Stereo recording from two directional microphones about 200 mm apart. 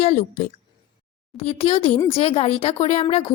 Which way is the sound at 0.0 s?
35° left (ahead or behind).